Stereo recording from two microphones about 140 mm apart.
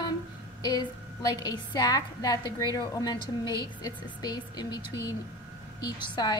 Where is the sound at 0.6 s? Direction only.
30° left (ahead or behind).